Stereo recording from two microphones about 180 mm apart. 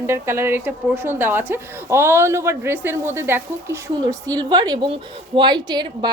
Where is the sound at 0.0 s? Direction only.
15° right (ahead or behind).